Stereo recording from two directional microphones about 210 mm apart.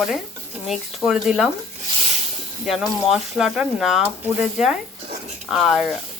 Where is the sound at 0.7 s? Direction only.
Centre (ahead or behind).